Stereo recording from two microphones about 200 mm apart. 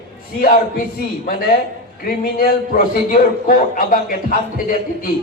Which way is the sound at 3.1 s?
40° left (ahead or behind).